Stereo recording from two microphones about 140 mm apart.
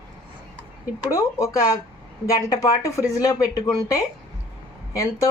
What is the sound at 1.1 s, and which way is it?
Speech, 20° left (ahead or behind).